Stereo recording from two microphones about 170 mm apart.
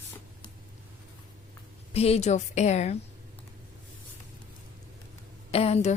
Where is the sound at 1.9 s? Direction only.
35° left (ahead or behind).